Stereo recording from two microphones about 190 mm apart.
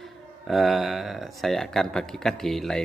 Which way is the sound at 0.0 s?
Centre (ahead or behind).